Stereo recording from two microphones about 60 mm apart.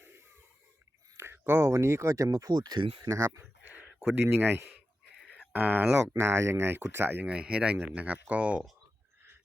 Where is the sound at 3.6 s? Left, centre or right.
Right.